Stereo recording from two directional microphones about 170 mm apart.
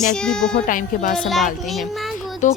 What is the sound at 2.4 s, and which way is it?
Speech, 45° left (ahead or behind).